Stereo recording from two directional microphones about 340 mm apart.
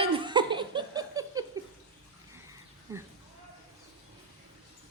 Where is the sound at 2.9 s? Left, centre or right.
Centre.